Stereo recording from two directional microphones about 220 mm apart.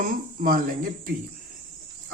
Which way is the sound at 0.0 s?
40° right (ahead or behind).